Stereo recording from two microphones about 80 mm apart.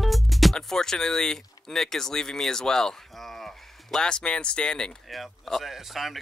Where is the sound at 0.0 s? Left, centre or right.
Centre.